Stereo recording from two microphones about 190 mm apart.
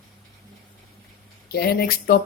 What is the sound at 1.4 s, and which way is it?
Speech, 55° left (ahead or behind).